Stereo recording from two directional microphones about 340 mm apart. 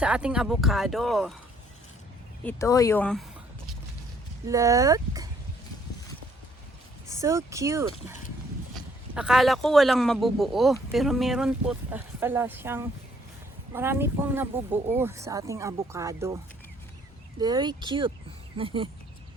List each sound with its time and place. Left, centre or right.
0.0 s speech: centre
2.4 s speech: centre
4.4 s speech: centre
7.1 s speech: centre
17.4 s speech: centre